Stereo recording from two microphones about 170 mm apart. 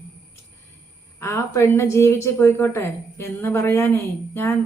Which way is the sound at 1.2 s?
15° left (ahead or behind).